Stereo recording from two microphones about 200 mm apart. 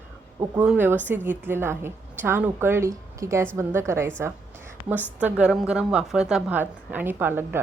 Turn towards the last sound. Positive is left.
turn(degrees=-10)  # may be behind; listen again after turning